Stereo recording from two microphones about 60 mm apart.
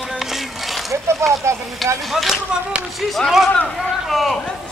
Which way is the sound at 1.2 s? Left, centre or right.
Right.